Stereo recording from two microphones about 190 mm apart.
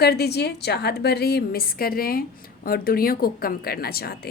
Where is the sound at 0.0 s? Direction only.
60° left (ahead or behind).